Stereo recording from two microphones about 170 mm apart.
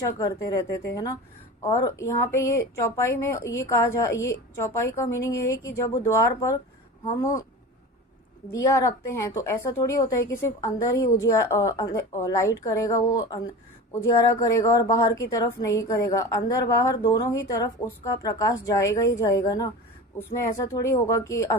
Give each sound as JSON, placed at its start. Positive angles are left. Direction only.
{"t": 0.0, "sound": "a woman's voice", "side_deg": 20}
{"t": 8.5, "sound": "a woman's voice", "side_deg": 20}